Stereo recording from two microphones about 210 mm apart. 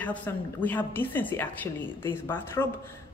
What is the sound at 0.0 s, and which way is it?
A woman's voice, 10° left (ahead or behind).